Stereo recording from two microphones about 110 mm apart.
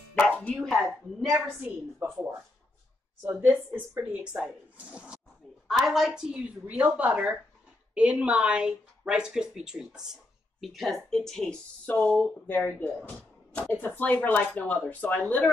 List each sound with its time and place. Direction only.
0.2 s dog: 10° left (ahead or behind)
0.7 s a woman's voice: 5° right (ahead or behind)
2.0 s speech: 20° right (ahead or behind)
3.3 s speech: 15° right (ahead or behind); by 15.5 s 15° left (ahead or behind)